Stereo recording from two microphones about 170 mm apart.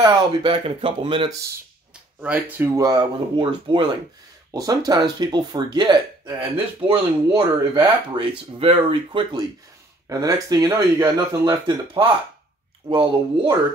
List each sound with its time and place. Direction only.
0.0 s speech: 25° right (ahead or behind)
2.2 s speech: 10° right (ahead or behind); by 9.4 s 30° right (ahead or behind)
10.0 s speech: 20° right (ahead or behind)